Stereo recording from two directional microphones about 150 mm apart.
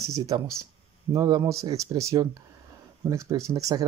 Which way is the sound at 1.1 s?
25° right (ahead or behind).